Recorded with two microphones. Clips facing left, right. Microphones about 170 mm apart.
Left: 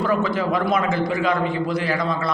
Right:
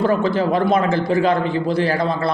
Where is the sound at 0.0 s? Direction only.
30° right (ahead or behind).